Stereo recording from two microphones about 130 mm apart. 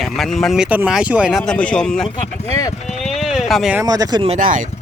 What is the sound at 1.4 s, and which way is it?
Speech, 5° left (ahead or behind).